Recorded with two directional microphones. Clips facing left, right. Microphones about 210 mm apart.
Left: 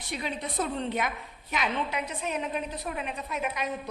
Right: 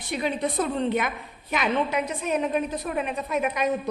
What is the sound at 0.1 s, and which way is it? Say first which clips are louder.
A woman's voice: right 8 dB; 55° right (ahead or behind).